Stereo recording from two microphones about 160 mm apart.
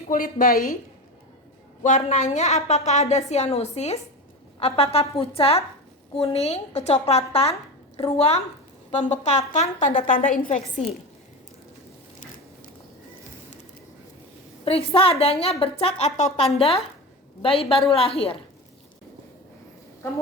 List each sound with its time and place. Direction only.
0.1 s a woman's voice: 60° left (ahead or behind)
1.8 s a woman's voice: 50° left (ahead or behind)
14.6 s a woman's voice: 35° left (ahead or behind)